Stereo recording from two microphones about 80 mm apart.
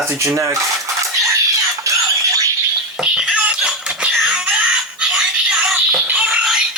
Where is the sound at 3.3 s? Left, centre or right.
Centre.